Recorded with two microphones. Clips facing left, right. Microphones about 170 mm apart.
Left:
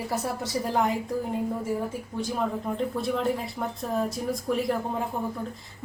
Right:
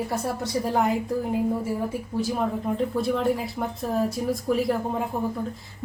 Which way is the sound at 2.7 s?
Centre (ahead or behind).